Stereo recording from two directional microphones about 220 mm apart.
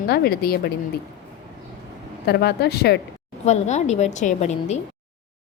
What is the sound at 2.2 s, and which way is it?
Speech, 50° left (ahead or behind).